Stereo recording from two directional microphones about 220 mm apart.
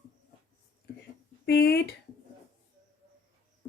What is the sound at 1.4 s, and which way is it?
Speech, 50° left (ahead or behind).